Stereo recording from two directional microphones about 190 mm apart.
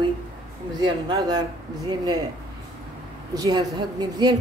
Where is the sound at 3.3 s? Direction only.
20° right (ahead or behind).